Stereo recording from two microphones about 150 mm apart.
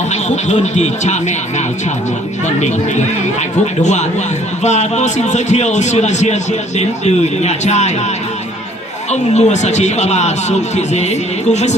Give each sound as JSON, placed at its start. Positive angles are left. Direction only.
{"t": 0.1, "sound": "a man's voice", "side_deg": 50}
{"t": 9.0, "sound": "a man's voice", "side_deg": 50}